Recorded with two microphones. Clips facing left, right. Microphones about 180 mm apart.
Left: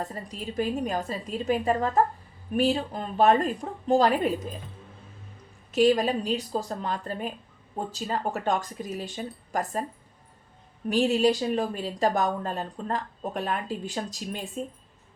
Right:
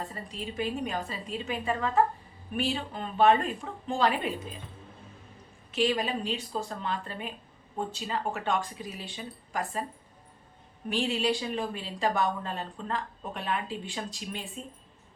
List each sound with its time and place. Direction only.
0.0 s a woman's voice: 40° left (ahead or behind)
5.7 s a woman's voice: 40° left (ahead or behind)
10.8 s a woman's voice: 40° left (ahead or behind)